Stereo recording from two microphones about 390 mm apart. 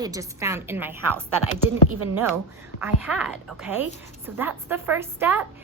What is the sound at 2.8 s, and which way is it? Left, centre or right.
A woman's voice, centre.